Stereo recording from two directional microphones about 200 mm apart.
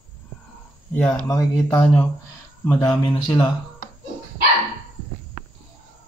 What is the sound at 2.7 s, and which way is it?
Speech, centre (ahead or behind).